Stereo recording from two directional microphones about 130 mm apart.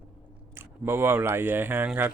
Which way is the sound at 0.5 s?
15° right (ahead or behind).